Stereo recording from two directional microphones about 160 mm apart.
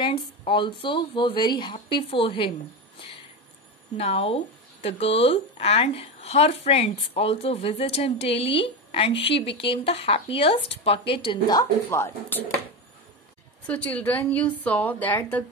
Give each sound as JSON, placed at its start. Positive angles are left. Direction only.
{"t": 0.0, "sound": "speech", "side_deg": 30}
{"t": 3.9, "sound": "speech", "side_deg": 40}
{"t": 13.7, "sound": "a woman's voice", "side_deg": 10}